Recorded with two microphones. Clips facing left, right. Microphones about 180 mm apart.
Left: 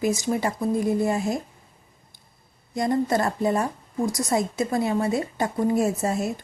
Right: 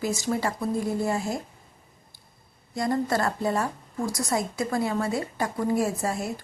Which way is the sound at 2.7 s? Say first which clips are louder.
Left 3 dB; 20° left (ahead or behind).